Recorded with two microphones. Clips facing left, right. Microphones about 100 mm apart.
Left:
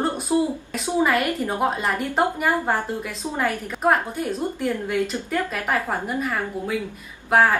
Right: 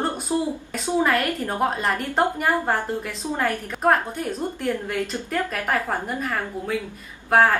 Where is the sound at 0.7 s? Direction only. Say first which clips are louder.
Even; 5° left (ahead or behind).